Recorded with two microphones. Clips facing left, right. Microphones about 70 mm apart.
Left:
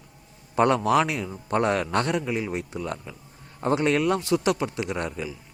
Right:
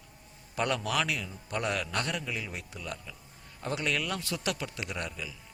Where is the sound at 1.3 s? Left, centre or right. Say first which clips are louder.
Left 9 dB; left.